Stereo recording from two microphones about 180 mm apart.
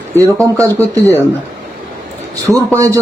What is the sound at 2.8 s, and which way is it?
Speech, 20° right (ahead or behind).